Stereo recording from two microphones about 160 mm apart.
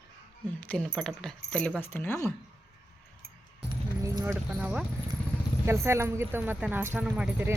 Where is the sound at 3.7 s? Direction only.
20° right (ahead or behind).